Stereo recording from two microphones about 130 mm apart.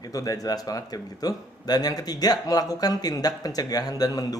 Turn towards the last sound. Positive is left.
turn(degrees=30)  # may be behind; listen again after turning